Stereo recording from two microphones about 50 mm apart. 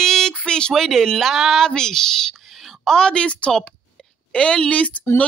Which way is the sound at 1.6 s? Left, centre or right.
Centre.